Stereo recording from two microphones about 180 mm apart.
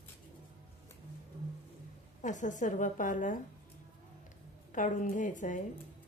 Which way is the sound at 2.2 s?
45° left (ahead or behind).